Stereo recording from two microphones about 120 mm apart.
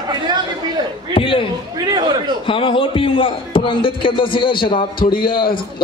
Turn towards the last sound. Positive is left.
turn(degrees=45)  # may be behind; listen again after turning